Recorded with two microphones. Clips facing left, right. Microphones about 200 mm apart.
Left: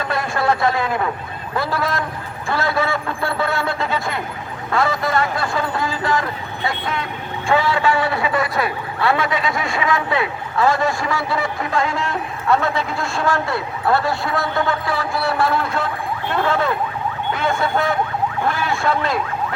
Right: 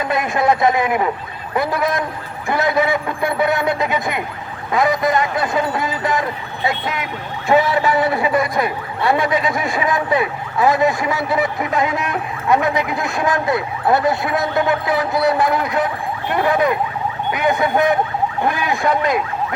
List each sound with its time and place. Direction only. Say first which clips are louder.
0.0 s a man's voice: right 3 dB; 20° right (ahead or behind)